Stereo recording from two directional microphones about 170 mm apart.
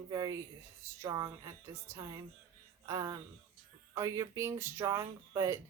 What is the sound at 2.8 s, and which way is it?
A woman's voice, 20° right (ahead or behind).